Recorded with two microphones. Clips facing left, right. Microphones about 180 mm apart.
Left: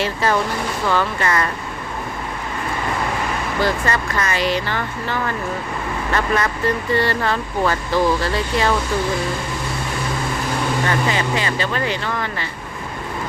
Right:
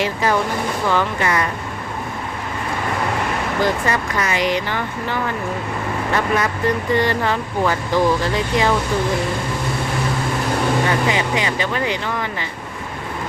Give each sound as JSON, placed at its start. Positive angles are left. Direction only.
{"t": 0.0, "sound": "speech", "side_deg": -15}
{"t": 3.6, "sound": "speech", "side_deg": -15}
{"t": 10.8, "sound": "speech", "side_deg": -15}